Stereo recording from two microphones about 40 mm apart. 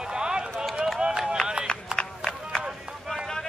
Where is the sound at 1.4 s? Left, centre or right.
Left.